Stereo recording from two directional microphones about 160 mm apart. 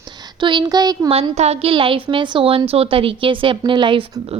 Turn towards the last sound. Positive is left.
turn(degrees=-30)  # may be behind; listen again after turning